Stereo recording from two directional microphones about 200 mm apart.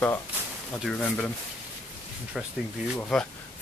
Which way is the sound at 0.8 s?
5° left (ahead or behind).